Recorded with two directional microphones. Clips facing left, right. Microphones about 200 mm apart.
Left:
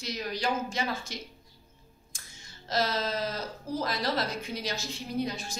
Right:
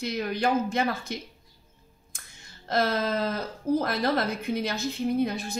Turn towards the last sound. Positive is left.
turn(degrees=-60)  # may be behind; listen again after turning